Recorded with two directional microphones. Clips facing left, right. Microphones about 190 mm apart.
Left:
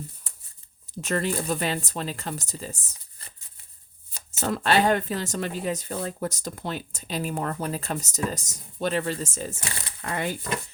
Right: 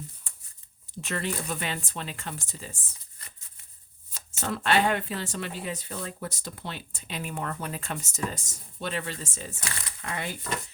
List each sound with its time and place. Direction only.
1.0 s speech: 40° left (ahead or behind)
9.6 s speech: 30° left (ahead or behind)